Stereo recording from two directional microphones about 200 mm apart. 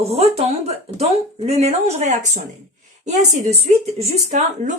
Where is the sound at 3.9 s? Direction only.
35° right (ahead or behind).